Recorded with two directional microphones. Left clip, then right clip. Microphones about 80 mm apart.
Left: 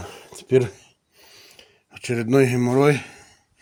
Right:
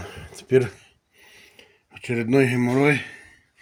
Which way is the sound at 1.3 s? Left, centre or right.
Left.